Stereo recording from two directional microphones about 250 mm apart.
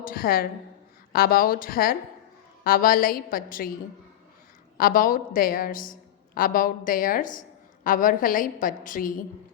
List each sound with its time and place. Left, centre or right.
0.0 s a woman's voice: left
4.8 s a woman's voice: left